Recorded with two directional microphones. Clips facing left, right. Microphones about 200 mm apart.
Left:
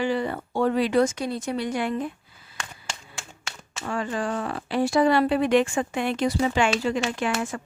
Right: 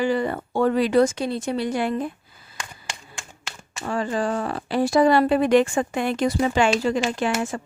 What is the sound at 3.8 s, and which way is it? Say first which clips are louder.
Speech: right 3 dB; 35° right (ahead or behind).